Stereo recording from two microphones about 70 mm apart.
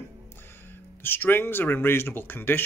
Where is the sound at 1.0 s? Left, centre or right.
Left.